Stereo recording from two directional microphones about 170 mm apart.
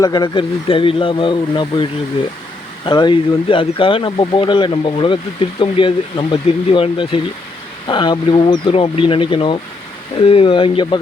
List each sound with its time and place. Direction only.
0.0 s speech: 25° left (ahead or behind)